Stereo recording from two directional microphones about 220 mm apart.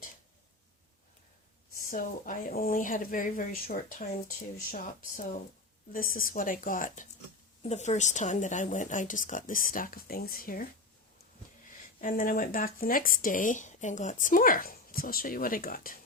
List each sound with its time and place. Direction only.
1.7 s speech: 40° left (ahead or behind)
11.9 s speech: 40° left (ahead or behind)